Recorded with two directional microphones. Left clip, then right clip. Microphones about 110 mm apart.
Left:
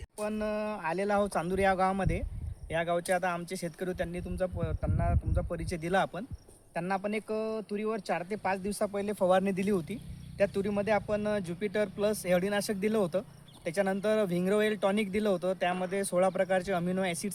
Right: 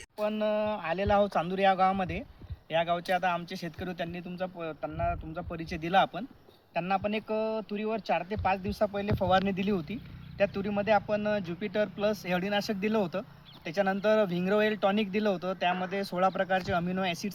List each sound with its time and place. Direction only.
0.3 s speech: 30° left (ahead or behind)
5.7 s speech: 30° left (ahead or behind)
16.8 s speech: 25° left (ahead or behind)